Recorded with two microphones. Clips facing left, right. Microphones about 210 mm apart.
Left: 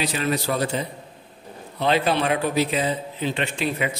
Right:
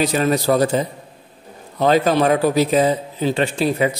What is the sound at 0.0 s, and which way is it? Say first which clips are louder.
A man's voice: right 7 dB; 45° right (ahead or behind).